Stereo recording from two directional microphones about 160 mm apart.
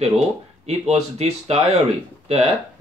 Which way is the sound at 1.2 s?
40° right (ahead or behind).